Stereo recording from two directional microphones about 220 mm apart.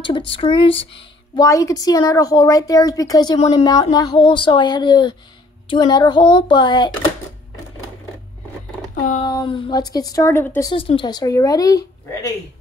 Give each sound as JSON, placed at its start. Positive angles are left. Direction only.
{"t": 0.0, "sound": "speech", "side_deg": 20}
{"t": 9.2, "sound": "speech", "side_deg": 20}
{"t": 10.7, "sound": "speech", "side_deg": 25}